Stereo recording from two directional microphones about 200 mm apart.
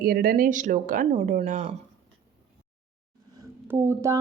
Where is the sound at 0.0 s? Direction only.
50° right (ahead or behind).